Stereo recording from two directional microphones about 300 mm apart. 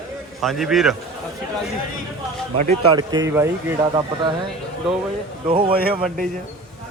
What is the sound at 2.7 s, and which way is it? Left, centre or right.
Speech, centre.